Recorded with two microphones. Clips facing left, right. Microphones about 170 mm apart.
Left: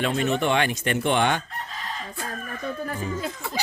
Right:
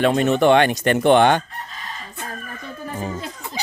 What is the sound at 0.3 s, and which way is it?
Speech, 70° right (ahead or behind).